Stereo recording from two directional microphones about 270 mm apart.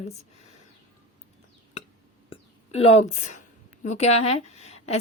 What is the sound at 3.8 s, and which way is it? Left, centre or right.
A woman's voice, left.